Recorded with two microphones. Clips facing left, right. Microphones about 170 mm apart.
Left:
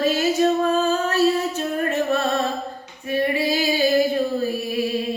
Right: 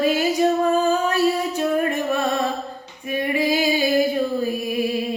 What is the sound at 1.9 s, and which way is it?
Music, 15° right (ahead or behind).